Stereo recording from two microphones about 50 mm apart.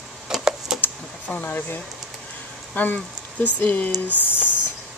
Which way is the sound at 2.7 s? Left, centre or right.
Left.